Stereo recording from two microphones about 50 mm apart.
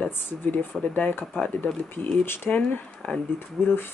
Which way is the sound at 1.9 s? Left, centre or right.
Left.